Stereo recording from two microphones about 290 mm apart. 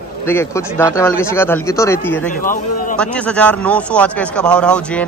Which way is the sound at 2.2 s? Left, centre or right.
Left.